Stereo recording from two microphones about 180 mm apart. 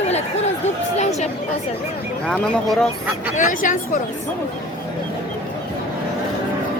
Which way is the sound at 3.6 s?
45° left (ahead or behind).